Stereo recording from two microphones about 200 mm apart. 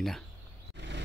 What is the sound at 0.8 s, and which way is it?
Vehicle, 60° right (ahead or behind).